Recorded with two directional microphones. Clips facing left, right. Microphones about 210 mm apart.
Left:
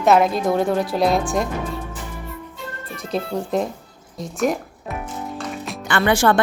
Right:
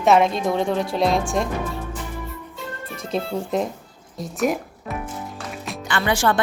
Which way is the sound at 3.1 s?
Centre (ahead or behind).